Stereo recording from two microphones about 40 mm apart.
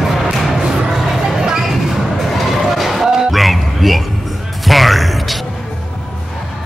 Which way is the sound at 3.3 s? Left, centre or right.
Centre.